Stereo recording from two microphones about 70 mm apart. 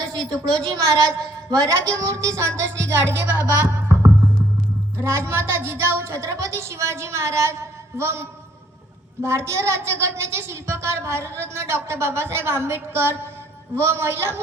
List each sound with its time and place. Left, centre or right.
0.2 s a woman's voice: centre
1.5 s a woman's voice: right
3.3 s music: right
5.0 s a woman's voice: right